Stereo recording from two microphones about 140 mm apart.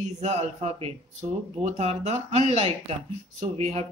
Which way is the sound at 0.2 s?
50° right (ahead or behind).